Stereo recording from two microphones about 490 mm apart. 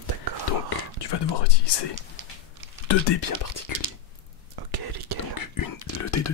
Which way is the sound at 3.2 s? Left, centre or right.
Left.